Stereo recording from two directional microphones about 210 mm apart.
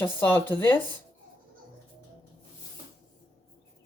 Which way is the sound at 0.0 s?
10° left (ahead or behind).